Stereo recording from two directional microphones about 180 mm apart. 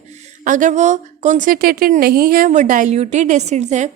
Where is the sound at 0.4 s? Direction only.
45° right (ahead or behind).